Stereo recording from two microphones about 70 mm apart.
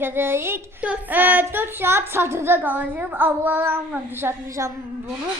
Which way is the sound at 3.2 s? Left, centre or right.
Right.